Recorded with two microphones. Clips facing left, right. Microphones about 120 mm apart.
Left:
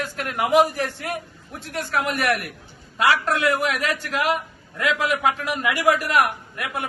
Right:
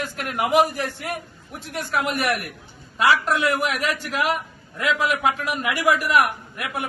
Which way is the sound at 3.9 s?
25° left (ahead or behind).